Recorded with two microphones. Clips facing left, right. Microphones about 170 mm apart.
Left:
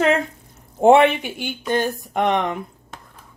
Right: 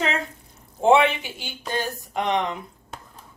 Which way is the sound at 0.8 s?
55° left (ahead or behind).